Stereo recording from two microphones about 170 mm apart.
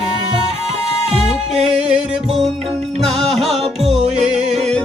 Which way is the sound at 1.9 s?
Centre (ahead or behind).